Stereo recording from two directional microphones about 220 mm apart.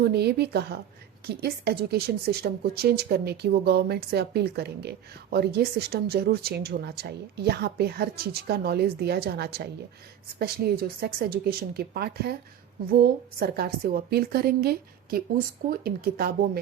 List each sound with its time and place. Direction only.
0.0 s a woman's voice: 45° right (ahead or behind)